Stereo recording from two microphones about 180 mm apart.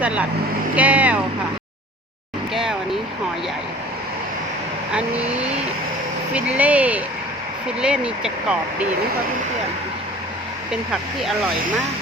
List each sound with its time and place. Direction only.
0.0 s speech: 5° right (ahead or behind)
2.5 s vehicle: centre (ahead or behind)
4.9 s speech: 5° right (ahead or behind)